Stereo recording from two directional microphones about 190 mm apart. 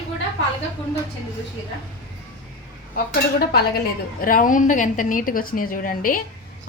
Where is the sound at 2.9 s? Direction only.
55° left (ahead or behind).